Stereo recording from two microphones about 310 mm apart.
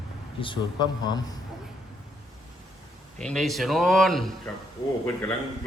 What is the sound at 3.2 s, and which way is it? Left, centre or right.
Speech, centre.